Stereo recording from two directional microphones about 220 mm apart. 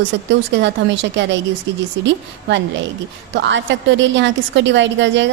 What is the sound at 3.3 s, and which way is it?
A woman's voice, 55° right (ahead or behind).